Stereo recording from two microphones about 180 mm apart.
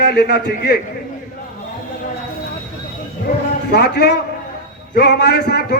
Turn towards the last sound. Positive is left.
turn(degrees=65)  # may be behind; listen again after turning